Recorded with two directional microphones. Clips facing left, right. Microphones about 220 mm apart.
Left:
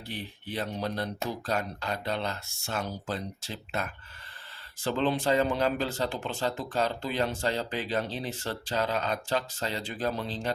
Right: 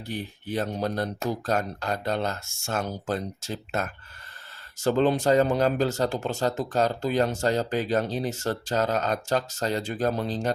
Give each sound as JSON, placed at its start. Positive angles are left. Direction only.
{"t": 0.1, "sound": "speech", "side_deg": -45}